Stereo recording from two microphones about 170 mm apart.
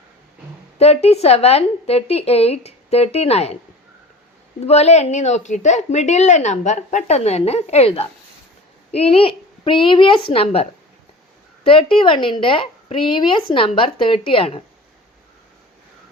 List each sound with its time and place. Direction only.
0.8 s a woman's voice: 40° left (ahead or behind)
4.6 s a woman's voice: 40° left (ahead or behind)